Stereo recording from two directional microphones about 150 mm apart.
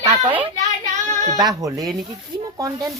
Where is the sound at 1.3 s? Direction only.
25° right (ahead or behind).